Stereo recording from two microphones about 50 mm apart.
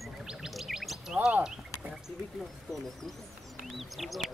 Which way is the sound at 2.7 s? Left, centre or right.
Centre.